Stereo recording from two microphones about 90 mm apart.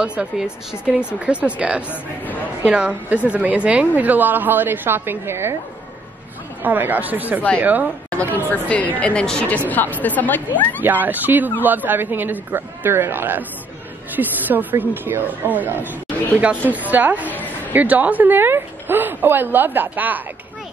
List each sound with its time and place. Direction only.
0.0 s speech: 10° right (ahead or behind)
1.9 s a woman's voice: 20° left (ahead or behind)
2.6 s a woman's voice: 15° right (ahead or behind)
6.6 s a woman's voice: 20° right (ahead or behind)
8.5 s a woman's voice: 15° left (ahead or behind)
10.8 s a woman's voice: 20° right (ahead or behind)